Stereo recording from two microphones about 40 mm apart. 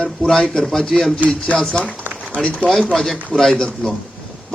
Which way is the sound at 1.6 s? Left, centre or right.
Centre.